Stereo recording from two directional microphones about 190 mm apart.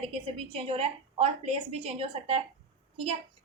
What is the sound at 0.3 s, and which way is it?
A woman's voice, 30° right (ahead or behind).